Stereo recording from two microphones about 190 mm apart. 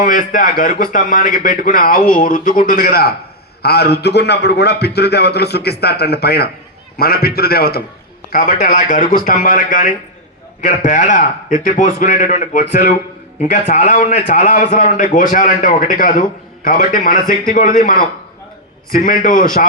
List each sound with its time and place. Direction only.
0.0 s a man's voice: 45° left (ahead or behind)